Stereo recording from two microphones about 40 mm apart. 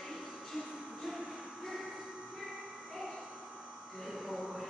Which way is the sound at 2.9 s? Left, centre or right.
Centre.